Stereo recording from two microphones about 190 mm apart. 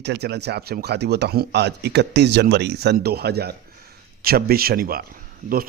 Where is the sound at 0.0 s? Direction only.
60° right (ahead or behind).